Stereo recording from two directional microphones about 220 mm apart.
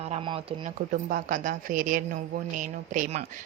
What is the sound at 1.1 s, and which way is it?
Speech, 35° right (ahead or behind).